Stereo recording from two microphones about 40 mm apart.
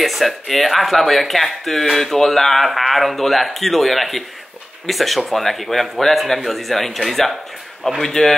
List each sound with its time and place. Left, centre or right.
0.0 s speech: centre